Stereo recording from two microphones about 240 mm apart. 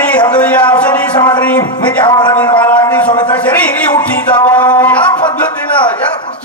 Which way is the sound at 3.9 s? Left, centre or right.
Centre.